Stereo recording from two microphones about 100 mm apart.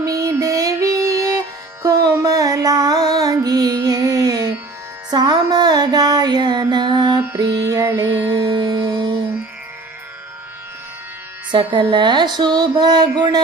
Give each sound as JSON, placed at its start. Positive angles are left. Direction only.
{"t": 0.0, "sound": "music", "side_deg": -35}
{"t": 7.3, "sound": "female singing", "side_deg": -35}
{"t": 8.1, "sound": "music", "side_deg": -45}
{"t": 11.5, "sound": "a sound", "side_deg": -55}